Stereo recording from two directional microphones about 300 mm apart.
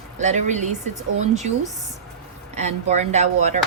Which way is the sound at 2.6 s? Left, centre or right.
Right.